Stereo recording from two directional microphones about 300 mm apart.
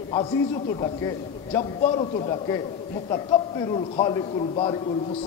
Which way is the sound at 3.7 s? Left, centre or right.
Centre.